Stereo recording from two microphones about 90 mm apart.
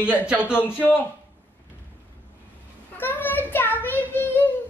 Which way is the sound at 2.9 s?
20° left (ahead or behind).